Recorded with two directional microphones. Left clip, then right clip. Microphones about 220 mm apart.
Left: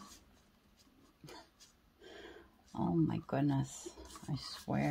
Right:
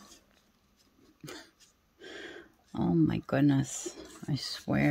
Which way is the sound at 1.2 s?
45° right (ahead or behind).